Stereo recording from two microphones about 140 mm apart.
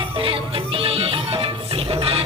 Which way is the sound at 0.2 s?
40° right (ahead or behind).